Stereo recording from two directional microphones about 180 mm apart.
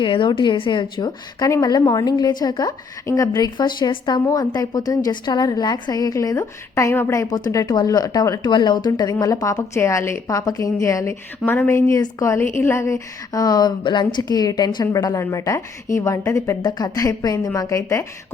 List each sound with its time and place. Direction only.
0.0 s a woman's voice: 25° left (ahead or behind)